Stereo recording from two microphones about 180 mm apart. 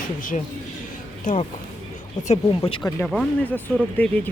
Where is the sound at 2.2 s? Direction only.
40° left (ahead or behind).